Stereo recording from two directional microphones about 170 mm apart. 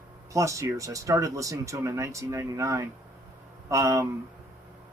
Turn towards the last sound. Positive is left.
turn(degrees=-20)  # may be behind; listen again after turning